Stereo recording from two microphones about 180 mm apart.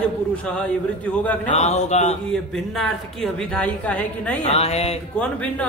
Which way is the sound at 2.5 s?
Centre (ahead or behind).